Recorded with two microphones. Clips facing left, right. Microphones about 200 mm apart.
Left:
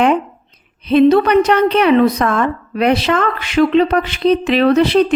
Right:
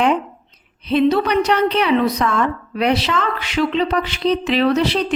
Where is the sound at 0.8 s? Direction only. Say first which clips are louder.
Left 6 dB; 55° left (ahead or behind).